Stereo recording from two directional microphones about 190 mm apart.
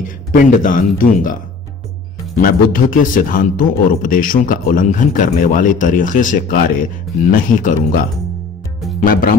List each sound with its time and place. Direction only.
0.3 s a man's voice: 45° left (ahead or behind)
2.4 s a man's voice: 45° left (ahead or behind)
9.0 s a man's voice: 50° left (ahead or behind)